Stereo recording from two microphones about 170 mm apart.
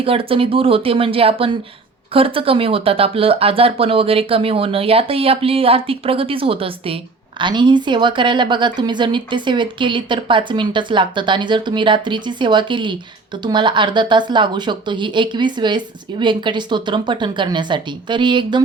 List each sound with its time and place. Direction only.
0.0 s speech: 35° right (ahead or behind)